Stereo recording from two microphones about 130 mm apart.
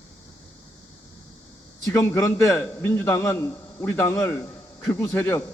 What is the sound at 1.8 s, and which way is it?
A man's voice, 20° left (ahead or behind).